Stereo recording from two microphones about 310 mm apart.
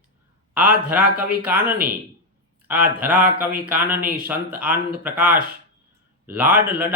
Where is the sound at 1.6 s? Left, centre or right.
Right.